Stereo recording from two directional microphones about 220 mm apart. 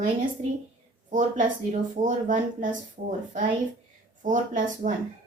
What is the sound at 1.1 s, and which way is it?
Speech, 35° right (ahead or behind).